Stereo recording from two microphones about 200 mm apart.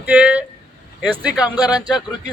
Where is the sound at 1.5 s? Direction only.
20° left (ahead or behind).